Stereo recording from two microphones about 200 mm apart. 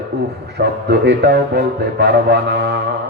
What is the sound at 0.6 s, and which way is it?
A man's voice, 55° right (ahead or behind).